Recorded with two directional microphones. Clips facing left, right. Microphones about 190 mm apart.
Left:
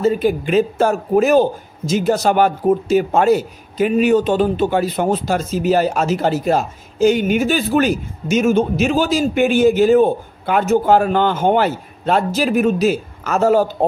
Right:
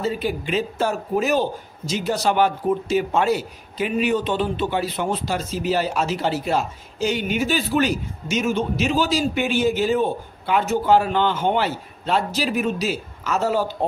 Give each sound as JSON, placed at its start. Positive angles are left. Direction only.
{"t": 0.0, "sound": "a man's voice", "side_deg": 50}